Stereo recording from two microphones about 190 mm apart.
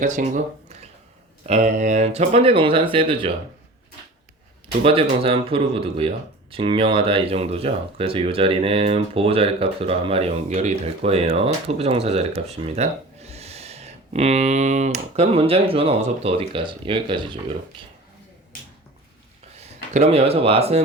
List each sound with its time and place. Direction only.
0.0 s speech: 40° right (ahead or behind)
4.8 s speech: 30° right (ahead or behind)
19.5 s speech: 35° right (ahead or behind)